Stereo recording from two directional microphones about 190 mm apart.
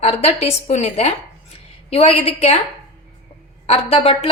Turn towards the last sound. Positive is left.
turn(degrees=30)  # may be behind; listen again after turning